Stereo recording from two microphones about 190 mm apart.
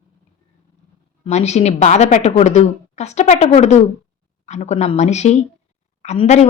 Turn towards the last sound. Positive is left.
turn(degrees=35)  # may be behind; listen again after turning